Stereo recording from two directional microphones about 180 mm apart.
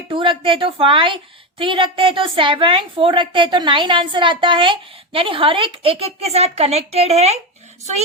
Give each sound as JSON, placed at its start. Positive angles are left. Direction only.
{"t": 0.1, "sound": "a woman's voice", "side_deg": -30}